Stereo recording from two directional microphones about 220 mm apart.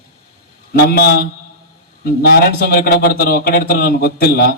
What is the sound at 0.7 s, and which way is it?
Speech, 45° left (ahead or behind).